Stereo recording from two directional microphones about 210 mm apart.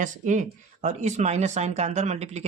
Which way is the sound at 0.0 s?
35° right (ahead or behind).